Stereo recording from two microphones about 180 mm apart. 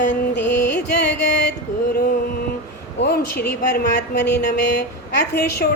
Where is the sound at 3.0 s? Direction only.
65° left (ahead or behind).